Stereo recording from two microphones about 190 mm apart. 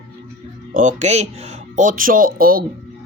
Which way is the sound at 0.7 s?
40° right (ahead or behind).